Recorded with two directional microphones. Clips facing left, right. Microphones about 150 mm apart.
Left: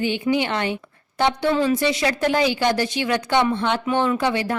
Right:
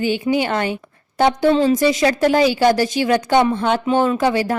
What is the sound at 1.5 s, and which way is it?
Speech, 25° right (ahead or behind).